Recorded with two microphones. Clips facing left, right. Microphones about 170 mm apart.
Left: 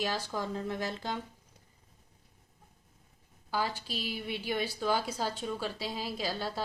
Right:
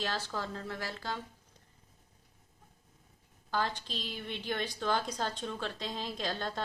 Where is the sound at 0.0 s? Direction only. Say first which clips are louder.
Left 3 dB; 10° left (ahead or behind).